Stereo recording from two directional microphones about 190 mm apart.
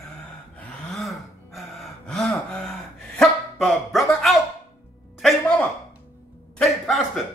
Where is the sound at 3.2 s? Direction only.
Centre (ahead or behind).